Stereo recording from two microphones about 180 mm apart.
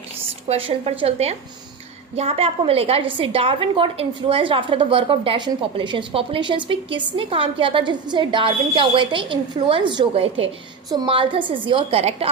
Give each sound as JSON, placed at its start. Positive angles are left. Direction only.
{"t": 0.4, "sound": "a woman's voice", "side_deg": -30}